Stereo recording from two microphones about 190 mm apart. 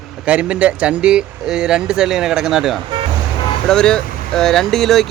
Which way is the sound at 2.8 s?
25° right (ahead or behind).